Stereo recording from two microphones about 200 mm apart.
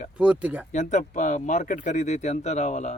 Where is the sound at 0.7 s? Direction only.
35° left (ahead or behind).